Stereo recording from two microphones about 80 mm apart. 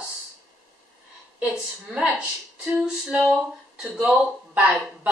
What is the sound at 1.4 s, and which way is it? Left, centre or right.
Speech, centre.